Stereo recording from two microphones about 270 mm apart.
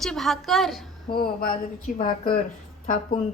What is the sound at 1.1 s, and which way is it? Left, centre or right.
Speech, left.